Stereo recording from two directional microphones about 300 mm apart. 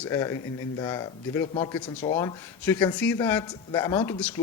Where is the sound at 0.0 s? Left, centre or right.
Centre.